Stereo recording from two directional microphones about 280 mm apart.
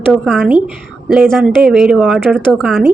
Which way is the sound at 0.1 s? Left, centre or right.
Centre.